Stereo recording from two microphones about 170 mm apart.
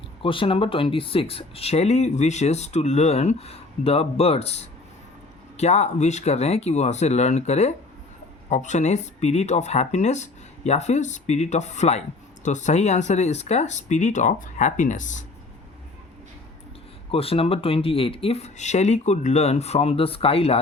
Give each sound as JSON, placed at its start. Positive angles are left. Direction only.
{"t": 0.2, "sound": "speech", "side_deg": 30}
{"t": 17.1, "sound": "speech", "side_deg": 35}